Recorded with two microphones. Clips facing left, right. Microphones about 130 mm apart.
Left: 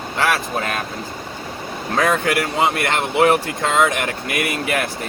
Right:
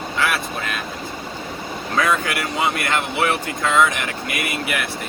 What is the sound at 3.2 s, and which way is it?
Speech, 35° left (ahead or behind).